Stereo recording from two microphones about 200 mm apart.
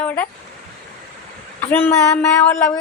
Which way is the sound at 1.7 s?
10° left (ahead or behind).